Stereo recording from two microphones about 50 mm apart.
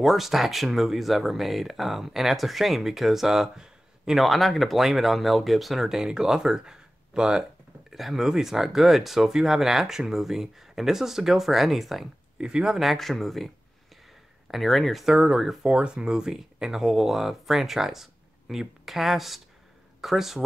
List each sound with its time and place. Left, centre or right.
0.0 s speech: centre
4.2 s speech: centre
12.4 s speech: centre
12.8 s speech: centre
14.5 s speech: centre
15.0 s speech: centre
15.6 s speech: centre